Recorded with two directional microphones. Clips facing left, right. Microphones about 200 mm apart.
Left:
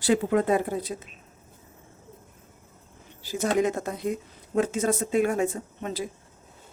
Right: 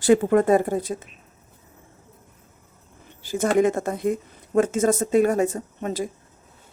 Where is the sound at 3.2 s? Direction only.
50° right (ahead or behind).